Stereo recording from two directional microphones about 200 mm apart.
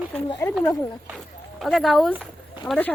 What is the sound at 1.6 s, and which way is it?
A woman's voice, centre (ahead or behind).